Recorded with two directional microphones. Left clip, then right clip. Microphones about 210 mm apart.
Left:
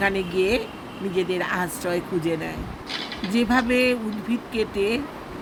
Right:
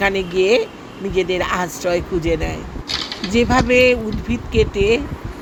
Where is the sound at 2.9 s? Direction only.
55° right (ahead or behind).